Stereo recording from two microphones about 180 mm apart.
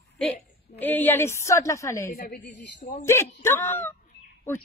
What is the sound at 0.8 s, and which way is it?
Speech, 10° left (ahead or behind).